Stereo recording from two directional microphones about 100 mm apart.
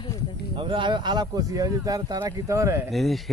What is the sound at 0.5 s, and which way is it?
A man's voice, 55° right (ahead or behind).